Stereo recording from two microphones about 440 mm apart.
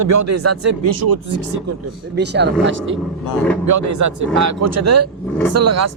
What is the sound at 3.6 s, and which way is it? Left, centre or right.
Speech, right.